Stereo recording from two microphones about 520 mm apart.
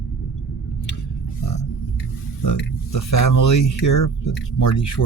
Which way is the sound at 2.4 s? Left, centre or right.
Left.